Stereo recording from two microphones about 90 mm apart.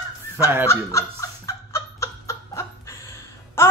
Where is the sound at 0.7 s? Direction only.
30° left (ahead or behind).